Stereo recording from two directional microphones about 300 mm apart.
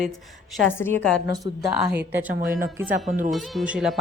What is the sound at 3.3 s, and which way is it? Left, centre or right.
Speech, centre.